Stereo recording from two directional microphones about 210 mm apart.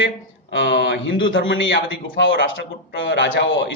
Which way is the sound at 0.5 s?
55° left (ahead or behind).